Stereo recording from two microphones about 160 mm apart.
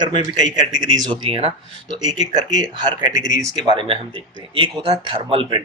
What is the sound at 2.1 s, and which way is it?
Speech, 45° left (ahead or behind).